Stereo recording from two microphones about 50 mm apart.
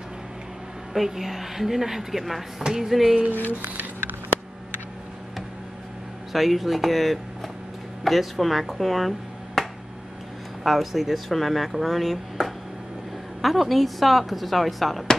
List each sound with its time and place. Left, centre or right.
0.9 s speech: centre
3.6 s a sound: right
6.3 s speech: centre
9.6 s finger snapping: centre
10.6 s speech: centre